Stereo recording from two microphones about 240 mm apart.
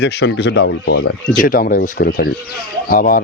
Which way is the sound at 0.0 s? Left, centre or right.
Left.